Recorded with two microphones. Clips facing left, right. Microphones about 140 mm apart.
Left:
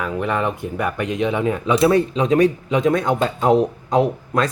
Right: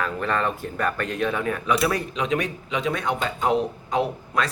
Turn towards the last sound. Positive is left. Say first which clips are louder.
# left 5 dB
turn(degrees=40)  # may be behind; listen again after turning